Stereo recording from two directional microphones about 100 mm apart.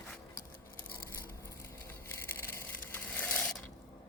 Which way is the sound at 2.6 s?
20° left (ahead or behind).